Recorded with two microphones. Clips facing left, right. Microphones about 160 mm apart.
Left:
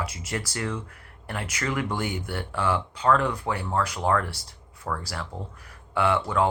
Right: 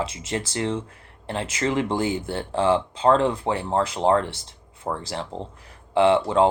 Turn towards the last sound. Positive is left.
turn(degrees=-25)  # may be behind; listen again after turning